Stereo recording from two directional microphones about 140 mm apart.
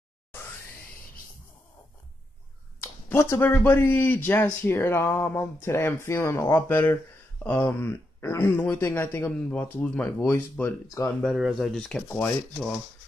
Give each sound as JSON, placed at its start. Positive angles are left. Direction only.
{"t": 2.8, "sound": "speech", "side_deg": 20}
{"t": 11.2, "sound": "speech", "side_deg": 0}